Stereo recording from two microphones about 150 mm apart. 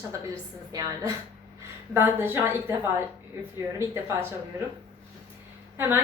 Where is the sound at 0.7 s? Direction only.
20° right (ahead or behind).